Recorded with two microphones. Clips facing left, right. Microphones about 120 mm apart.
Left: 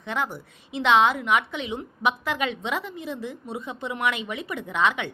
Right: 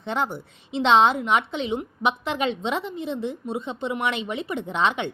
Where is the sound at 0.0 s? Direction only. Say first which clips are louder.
Right 3 dB; 30° right (ahead or behind).